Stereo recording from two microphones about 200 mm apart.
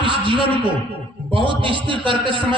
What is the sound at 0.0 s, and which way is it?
A man's voice, 25° right (ahead or behind).